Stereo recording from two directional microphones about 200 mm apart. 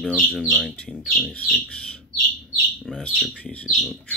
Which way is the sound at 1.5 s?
5° left (ahead or behind).